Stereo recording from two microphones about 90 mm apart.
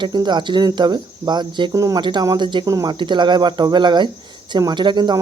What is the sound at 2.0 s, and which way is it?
Speech, 55° right (ahead or behind).